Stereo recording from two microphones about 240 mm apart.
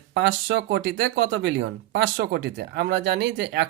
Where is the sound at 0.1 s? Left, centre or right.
Right.